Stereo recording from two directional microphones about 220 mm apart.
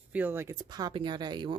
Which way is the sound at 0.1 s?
10° right (ahead or behind).